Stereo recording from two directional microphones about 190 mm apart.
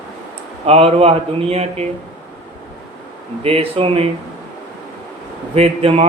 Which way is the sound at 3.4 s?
30° right (ahead or behind).